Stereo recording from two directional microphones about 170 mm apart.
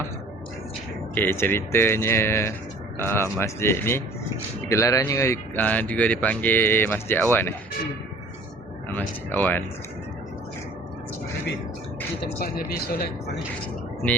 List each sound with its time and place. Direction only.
1.1 s speech: 10° left (ahead or behind)
8.9 s speech: 10° left (ahead or behind)
12.4 s a man's voice: 60° left (ahead or behind)